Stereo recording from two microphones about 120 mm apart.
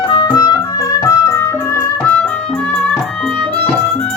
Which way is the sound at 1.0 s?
25° left (ahead or behind).